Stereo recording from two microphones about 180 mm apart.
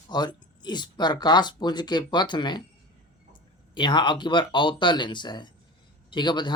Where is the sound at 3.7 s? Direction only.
25° left (ahead or behind).